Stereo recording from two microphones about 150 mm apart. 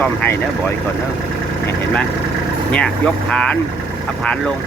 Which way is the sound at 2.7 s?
5° left (ahead or behind).